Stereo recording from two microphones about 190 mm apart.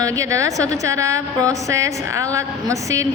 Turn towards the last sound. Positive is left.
turn(degrees=-15)  # may be behind; listen again after turning